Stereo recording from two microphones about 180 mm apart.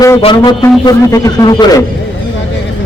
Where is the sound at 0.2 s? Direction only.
25° left (ahead or behind).